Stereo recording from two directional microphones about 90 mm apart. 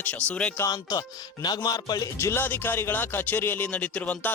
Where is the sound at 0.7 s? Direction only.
50° left (ahead or behind).